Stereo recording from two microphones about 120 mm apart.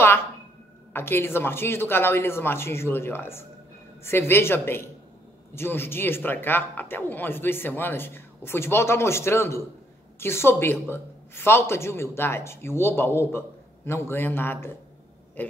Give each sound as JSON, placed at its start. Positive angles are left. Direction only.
{"t": 0.9, "sound": "speech", "side_deg": 20}